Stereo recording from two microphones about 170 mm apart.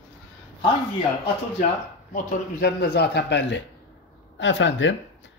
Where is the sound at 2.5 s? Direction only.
75° left (ahead or behind).